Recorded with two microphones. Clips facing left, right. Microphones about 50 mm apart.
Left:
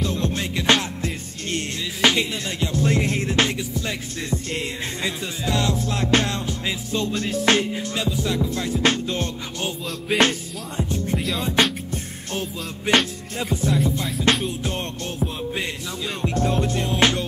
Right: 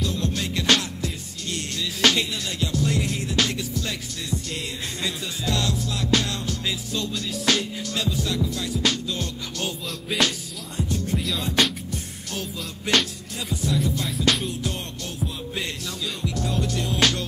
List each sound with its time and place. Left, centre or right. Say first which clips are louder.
0.0 s music: left 2 dB; left
2.0 s music: left 2 dB; centre
2.6 s music: left 3 dB; left
3.4 s music: left 2 dB; left
9.6 s music: left 2 dB; left